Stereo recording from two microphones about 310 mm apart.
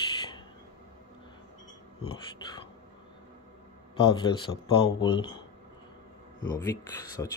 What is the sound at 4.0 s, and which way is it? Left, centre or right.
Speech, centre.